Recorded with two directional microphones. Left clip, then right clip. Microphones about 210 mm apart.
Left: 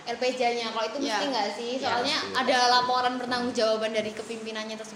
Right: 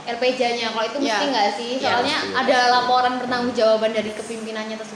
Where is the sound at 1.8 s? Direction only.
25° left (ahead or behind).